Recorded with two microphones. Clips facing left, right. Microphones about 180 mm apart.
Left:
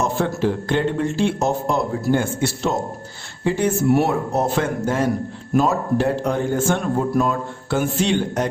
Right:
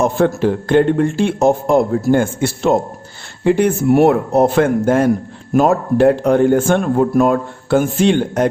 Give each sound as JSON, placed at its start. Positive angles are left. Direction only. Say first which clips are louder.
{"t": 0.0, "sound": "speech", "louder": "right 6 dB", "side_deg": -55}